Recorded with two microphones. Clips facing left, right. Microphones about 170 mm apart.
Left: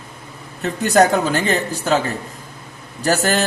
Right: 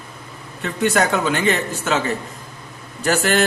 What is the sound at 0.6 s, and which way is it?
Speech, 40° left (ahead or behind).